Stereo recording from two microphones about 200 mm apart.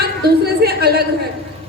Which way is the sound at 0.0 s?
50° right (ahead or behind).